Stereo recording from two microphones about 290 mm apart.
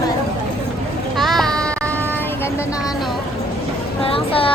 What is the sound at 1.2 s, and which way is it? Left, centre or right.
Child singing, centre.